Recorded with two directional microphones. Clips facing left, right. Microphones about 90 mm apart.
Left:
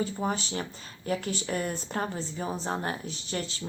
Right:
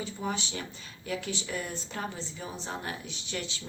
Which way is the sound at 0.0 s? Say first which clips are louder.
Left 4 dB; 40° left (ahead or behind).